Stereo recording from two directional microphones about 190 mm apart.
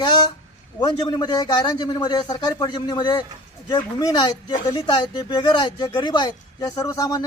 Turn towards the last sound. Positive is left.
turn(degrees=20)  # may be behind; listen again after turning